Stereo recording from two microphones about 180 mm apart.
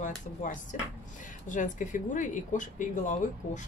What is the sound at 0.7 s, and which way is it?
Speech, 45° left (ahead or behind).